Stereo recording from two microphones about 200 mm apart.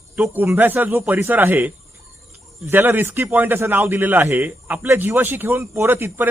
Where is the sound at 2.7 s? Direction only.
10° right (ahead or behind).